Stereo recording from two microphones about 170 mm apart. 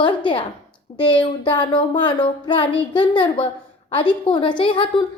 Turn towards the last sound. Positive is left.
turn(degrees=30)  # may be behind; listen again after turning